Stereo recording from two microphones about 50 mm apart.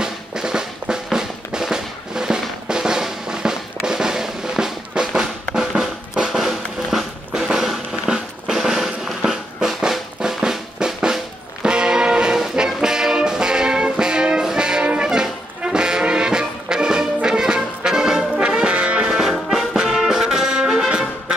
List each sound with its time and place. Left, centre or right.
0.0 s drum: centre
11.6 s music: centre
15.0 s brass instrument: centre
19.2 s music: centre